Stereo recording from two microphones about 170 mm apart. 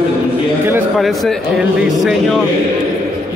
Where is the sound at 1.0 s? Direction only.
Centre (ahead or behind).